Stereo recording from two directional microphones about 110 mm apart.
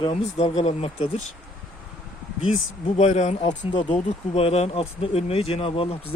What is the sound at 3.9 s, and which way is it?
Speech, 75° left (ahead or behind).